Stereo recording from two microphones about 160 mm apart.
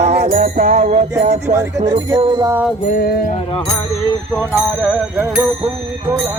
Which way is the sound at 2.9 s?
75° left (ahead or behind).